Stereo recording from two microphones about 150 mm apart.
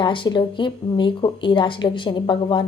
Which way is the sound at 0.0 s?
35° left (ahead or behind).